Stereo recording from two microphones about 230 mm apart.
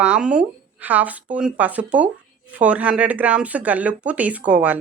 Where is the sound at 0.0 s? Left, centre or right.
Centre.